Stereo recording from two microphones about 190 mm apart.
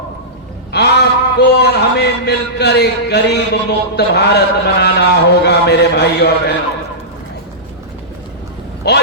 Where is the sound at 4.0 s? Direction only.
60° left (ahead or behind).